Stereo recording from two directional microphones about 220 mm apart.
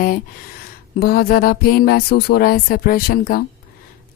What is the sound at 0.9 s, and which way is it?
Speech, 45° left (ahead or behind).